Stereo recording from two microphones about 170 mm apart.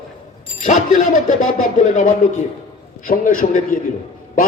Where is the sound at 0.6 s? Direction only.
50° left (ahead or behind).